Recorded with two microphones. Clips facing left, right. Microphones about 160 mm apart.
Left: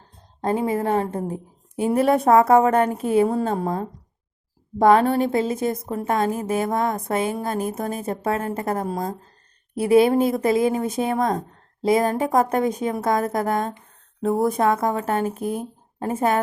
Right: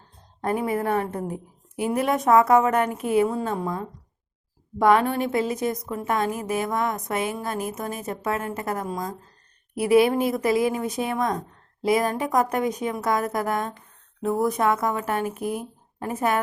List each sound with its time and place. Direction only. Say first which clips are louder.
0.4 s a woman's voice: left 2 dB; 25° left (ahead or behind)